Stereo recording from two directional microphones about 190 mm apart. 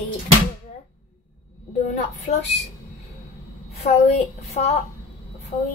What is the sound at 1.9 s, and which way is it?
Speech, 40° left (ahead or behind).